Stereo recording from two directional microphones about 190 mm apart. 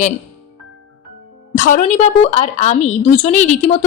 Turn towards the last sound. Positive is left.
turn(degrees=40)  # may be behind; listen again after turning